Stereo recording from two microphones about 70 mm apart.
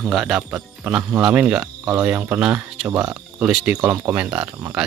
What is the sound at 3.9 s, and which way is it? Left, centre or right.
Speech, right.